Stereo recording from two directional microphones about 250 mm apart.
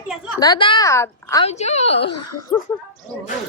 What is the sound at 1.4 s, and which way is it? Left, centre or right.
Speech, left.